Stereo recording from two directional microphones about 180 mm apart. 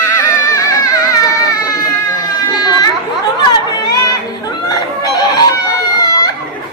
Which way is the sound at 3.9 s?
20° left (ahead or behind).